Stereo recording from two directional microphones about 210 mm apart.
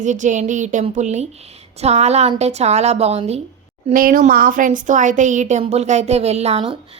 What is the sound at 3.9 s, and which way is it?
A woman's voice, 40° right (ahead or behind).